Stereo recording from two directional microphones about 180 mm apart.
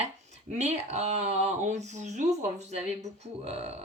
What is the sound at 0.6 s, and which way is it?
Speech, 40° right (ahead or behind).